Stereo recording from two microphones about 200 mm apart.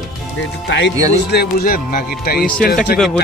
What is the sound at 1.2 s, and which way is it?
Speech, 50° left (ahead or behind).